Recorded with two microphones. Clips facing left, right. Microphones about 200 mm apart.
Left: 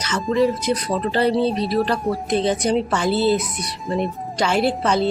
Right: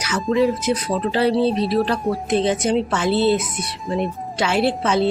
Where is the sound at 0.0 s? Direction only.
5° right (ahead or behind).